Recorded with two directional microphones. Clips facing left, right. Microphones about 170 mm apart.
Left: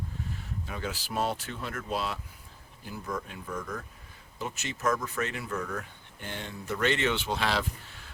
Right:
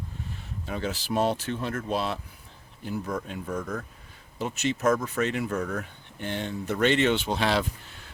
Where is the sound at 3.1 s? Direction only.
50° right (ahead or behind).